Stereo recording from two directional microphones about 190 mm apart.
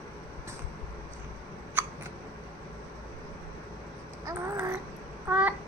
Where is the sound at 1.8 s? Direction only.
10° right (ahead or behind).